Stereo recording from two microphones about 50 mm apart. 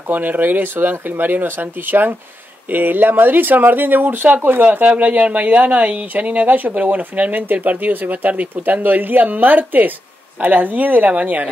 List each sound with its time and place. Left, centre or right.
0.1 s speech: right
4.4 s speech: right
4.6 s speech: right